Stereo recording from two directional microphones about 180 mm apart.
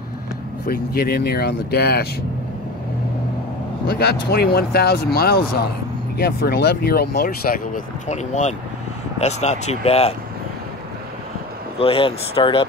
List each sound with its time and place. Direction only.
0.7 s speech: 55° left (ahead or behind)
3.8 s speech: 60° left (ahead or behind); by 10.1 s 35° left (ahead or behind)
11.8 s speech: 30° left (ahead or behind)